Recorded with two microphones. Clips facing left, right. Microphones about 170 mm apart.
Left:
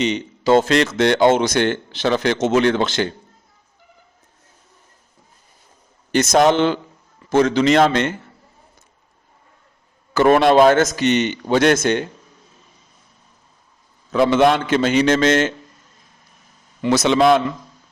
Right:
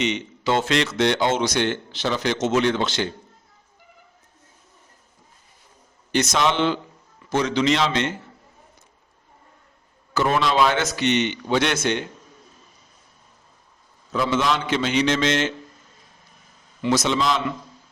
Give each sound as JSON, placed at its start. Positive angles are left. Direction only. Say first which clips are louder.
{"t": 0.0, "sound": "speech", "louder": "left 4 dB", "side_deg": 35}
{"t": 6.1, "sound": "speech", "louder": "left 7 dB", "side_deg": 45}
{"t": 10.2, "sound": "speech", "louder": "left 8 dB", "side_deg": 55}
{"t": 14.1, "sound": "speech", "louder": "left 8 dB", "side_deg": 65}
{"t": 16.8, "sound": "a man's voice", "louder": "left 6 dB", "side_deg": 65}